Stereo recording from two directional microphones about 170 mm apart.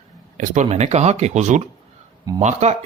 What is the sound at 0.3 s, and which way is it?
Speech, 50° right (ahead or behind).